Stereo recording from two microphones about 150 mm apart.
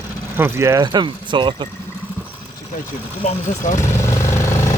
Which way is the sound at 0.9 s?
30° right (ahead or behind).